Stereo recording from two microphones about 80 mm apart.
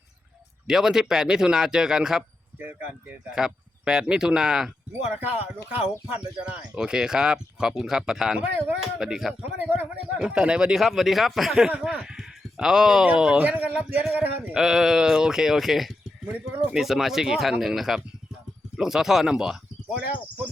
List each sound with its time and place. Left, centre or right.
0.7 s speech: centre
2.6 s speech: right
3.3 s speech: centre
6.1 s speech: centre
9.4 s speech: centre
14.5 s speech: centre